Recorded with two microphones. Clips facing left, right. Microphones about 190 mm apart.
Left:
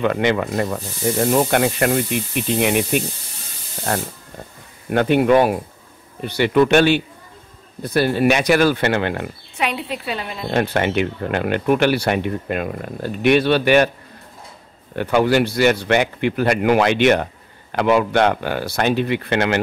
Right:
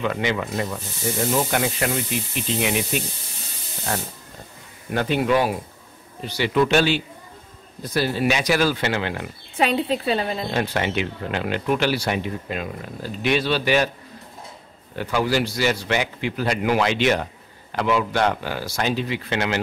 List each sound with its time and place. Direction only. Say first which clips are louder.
0.0 s speech: left 6 dB; 55° left (ahead or behind)
4.9 s speech: left 6 dB; 55° left (ahead or behind)
9.6 s a woman's voice: right 3 dB; 35° right (ahead or behind)
10.5 s speech: left 8 dB; 55° left (ahead or behind)
15.0 s speech: left 6 dB; 60° left (ahead or behind)